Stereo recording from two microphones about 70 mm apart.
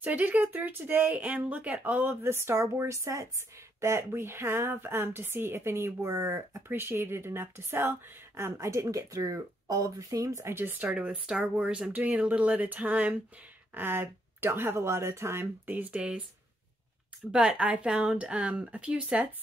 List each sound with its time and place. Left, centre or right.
0.0 s speech: right
10.9 s speech: centre; by 15.7 s right
15.7 s speech: right
17.3 s speech: centre